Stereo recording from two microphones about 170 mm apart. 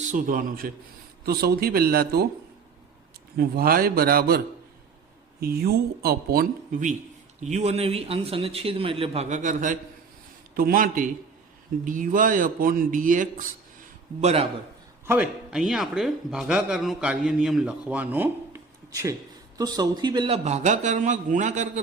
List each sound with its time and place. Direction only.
0.0 s a man's voice: 50° right (ahead or behind)
1.2 s speech: 65° right (ahead or behind)
3.3 s speech: 60° right (ahead or behind)
5.4 s speech: 65° right (ahead or behind)
7.4 s a man's voice: 40° right (ahead or behind)
10.5 s a man's voice: 60° right (ahead or behind)
14.2 s a man's voice: 40° right (ahead or behind)
15.0 s a man's voice: 10° right (ahead or behind); by 21.7 s 45° right (ahead or behind)